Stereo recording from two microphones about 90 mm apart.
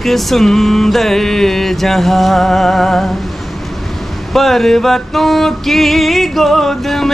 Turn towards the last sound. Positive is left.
turn(degrees=5)  # may be behind; listen again after turning